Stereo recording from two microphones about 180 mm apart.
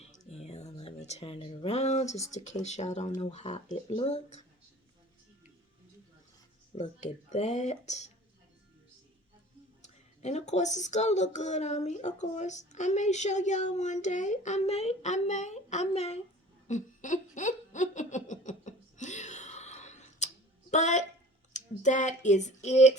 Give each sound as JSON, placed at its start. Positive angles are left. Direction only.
{"t": 0.0, "sound": "a sound", "side_deg": 35}
{"t": 2.3, "sound": "speech", "side_deg": 40}
{"t": 6.7, "sound": "speech", "side_deg": 40}
{"t": 9.8, "sound": "speech", "side_deg": 40}
{"t": 16.6, "sound": "a sound", "side_deg": 45}
{"t": 21.5, "sound": "speech", "side_deg": 45}